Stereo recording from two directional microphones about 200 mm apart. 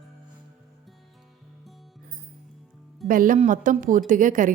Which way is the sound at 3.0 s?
45° right (ahead or behind).